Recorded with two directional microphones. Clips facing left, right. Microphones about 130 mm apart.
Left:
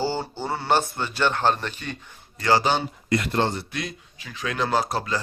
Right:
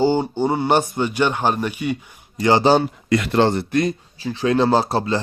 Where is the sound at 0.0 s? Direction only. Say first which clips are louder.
Right 9 dB; 15° right (ahead or behind).